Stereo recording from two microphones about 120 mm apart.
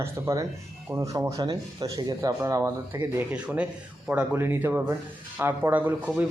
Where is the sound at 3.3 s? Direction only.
10° right (ahead or behind).